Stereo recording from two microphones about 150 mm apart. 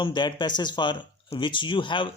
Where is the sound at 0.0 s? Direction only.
30° left (ahead or behind).